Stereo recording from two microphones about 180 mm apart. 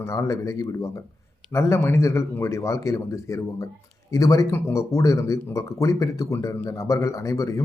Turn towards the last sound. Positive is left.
turn(degrees=20)  # may be behind; listen again after turning